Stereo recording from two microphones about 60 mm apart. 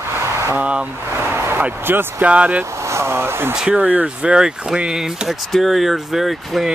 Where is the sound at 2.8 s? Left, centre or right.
Right.